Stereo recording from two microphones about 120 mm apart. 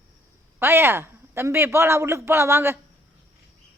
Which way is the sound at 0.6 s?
20° right (ahead or behind).